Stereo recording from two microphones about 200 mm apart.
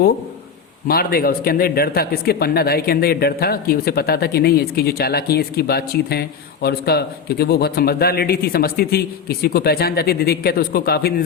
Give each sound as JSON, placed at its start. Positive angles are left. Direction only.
{"t": 0.9, "sound": "speech", "side_deg": 50}